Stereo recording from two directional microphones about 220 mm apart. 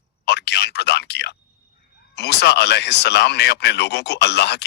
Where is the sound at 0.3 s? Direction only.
50° left (ahead or behind).